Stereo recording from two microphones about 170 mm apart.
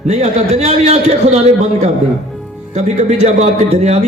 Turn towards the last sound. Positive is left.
turn(degrees=-40)  # may be behind; listen again after turning